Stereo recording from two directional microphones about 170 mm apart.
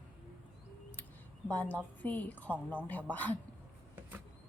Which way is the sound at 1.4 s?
10° left (ahead or behind).